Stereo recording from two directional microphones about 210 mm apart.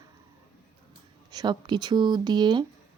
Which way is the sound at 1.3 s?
20° right (ahead or behind).